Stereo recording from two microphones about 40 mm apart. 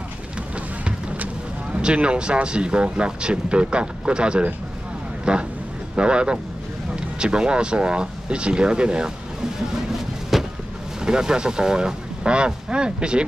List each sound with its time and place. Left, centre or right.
1.1 s vehicle: right
1.8 s speech: right
10.3 s a sound: centre
11.0 s speech: centre